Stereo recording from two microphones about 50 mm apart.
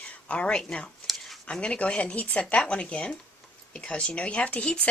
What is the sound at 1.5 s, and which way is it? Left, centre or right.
Speech, left.